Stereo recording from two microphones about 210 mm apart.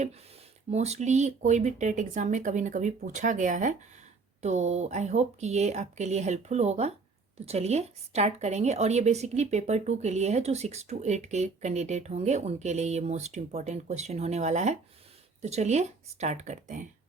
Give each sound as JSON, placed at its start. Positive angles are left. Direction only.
{"t": 0.7, "sound": "a woman's voice", "side_deg": -30}